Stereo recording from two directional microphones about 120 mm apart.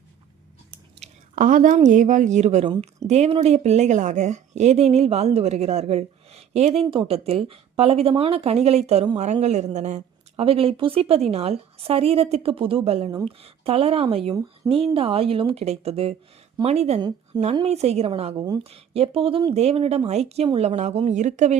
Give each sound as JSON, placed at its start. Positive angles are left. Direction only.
{"t": 0.9, "sound": "speech", "side_deg": -80}
{"t": 3.1, "sound": "a woman's voice", "side_deg": -60}
{"t": 6.9, "sound": "a woman's voice", "side_deg": -50}
{"t": 10.4, "sound": "a woman's voice", "side_deg": -50}
{"t": 21.1, "sound": "speech", "side_deg": -80}